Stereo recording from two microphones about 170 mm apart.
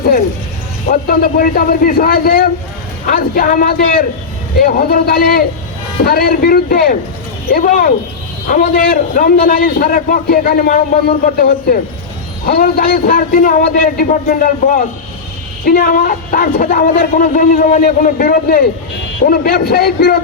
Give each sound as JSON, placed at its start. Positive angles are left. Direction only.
{"t": 0.9, "sound": "a man's voice", "side_deg": 60}